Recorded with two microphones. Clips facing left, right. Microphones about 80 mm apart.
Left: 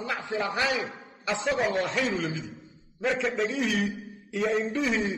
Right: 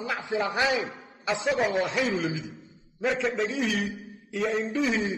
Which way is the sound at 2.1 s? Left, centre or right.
Centre.